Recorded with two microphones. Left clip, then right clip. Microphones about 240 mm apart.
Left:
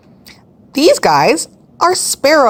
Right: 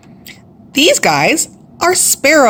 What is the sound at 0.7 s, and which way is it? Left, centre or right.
A woman's voice, centre.